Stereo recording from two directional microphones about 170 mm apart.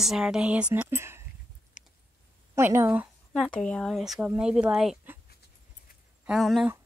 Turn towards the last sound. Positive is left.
turn(degrees=0)  # may be behind; listen again after turning